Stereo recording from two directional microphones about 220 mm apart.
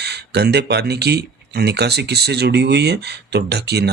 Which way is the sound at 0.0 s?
50° right (ahead or behind).